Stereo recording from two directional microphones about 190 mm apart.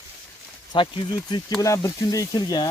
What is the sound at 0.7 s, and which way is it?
Speech, 25° left (ahead or behind).